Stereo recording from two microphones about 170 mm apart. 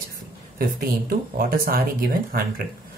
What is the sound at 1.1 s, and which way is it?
Speech, 60° right (ahead or behind).